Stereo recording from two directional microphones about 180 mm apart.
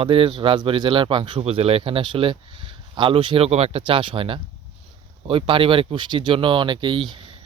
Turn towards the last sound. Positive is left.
turn(degrees=-30)  # may be behind; listen again after turning